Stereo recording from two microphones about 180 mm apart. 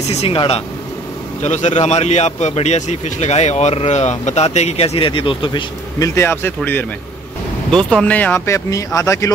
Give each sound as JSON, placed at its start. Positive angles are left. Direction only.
{"t": 0.1, "sound": "a man's voice", "side_deg": 30}
{"t": 5.9, "sound": "speech", "side_deg": 15}